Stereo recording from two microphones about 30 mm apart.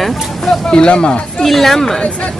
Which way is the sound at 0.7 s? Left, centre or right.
Left.